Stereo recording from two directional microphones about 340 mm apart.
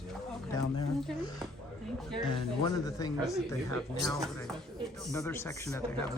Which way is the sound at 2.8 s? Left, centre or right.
Centre.